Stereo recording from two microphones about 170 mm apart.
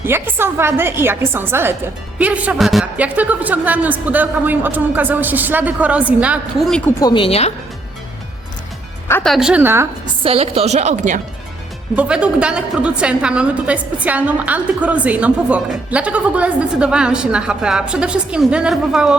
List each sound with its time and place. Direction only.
0.0 s a woman's voice: 15° right (ahead or behind); by 6.9 s 5° left (ahead or behind)
7.0 s a woman's voice: 30° left (ahead or behind)
9.2 s a woman's voice: centre (ahead or behind)
10.2 s a woman's voice: 35° right (ahead or behind)
11.9 s a woman's voice: 5° right (ahead or behind)